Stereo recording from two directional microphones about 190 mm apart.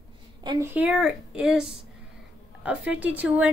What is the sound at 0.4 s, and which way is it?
Speech, 25° right (ahead or behind).